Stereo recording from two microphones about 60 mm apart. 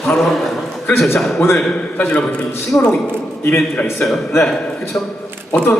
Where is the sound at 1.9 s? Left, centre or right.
Left.